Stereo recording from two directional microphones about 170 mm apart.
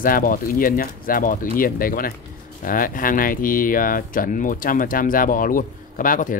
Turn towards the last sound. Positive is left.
turn(degrees=50)  # may be behind; listen again after turning